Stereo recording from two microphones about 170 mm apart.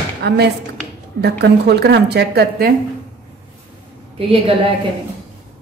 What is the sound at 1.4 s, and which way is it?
A woman's voice, 75° right (ahead or behind).